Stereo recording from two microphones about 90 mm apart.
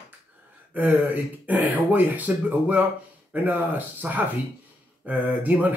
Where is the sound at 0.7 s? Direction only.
20° right (ahead or behind).